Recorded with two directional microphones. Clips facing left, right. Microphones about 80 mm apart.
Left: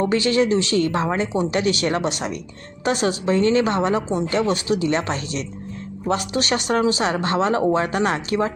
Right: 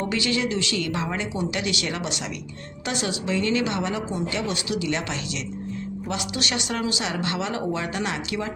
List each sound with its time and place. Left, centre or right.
0.0 s speech: left